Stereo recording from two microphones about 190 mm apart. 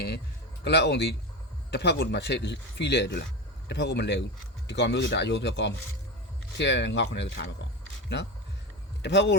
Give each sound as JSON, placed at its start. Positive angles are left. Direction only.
{"t": 0.6, "sound": "speech", "side_deg": 65}
{"t": 9.0, "sound": "speech", "side_deg": 65}